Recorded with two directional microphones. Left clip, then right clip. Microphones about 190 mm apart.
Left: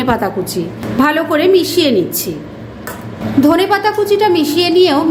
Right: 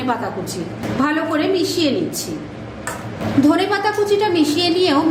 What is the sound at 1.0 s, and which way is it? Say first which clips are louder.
Speech: left 7 dB; 40° left (ahead or behind).